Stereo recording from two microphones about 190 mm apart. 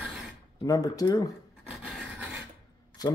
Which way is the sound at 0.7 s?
20° left (ahead or behind).